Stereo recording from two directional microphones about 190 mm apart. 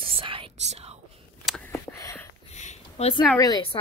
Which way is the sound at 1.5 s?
5° left (ahead or behind).